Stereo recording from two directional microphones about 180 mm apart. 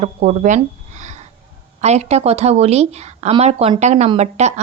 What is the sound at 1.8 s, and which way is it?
A woman's voice, 35° right (ahead or behind).